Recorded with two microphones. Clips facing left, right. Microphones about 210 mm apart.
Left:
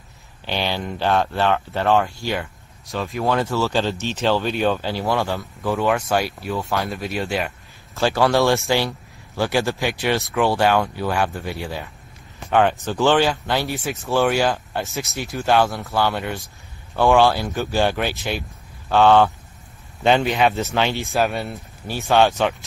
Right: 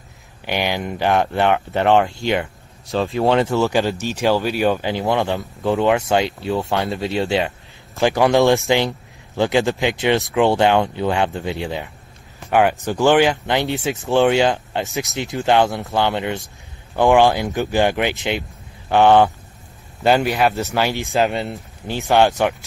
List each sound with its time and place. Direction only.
0.5 s speech: 15° right (ahead or behind)
20.0 s speech: 5° right (ahead or behind)